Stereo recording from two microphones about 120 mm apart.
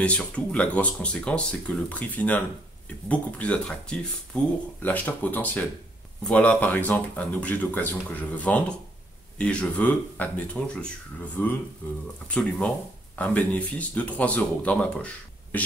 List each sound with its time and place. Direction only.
0.0 s speech: 10° left (ahead or behind)